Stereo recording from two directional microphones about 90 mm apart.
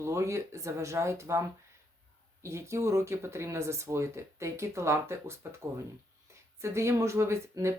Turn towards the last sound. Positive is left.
turn(degrees=-30)  # may be behind; listen again after turning